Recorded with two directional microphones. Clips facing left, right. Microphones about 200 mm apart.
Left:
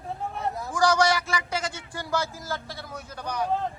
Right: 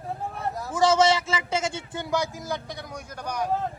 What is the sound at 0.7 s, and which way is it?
A man's voice, 25° right (ahead or behind).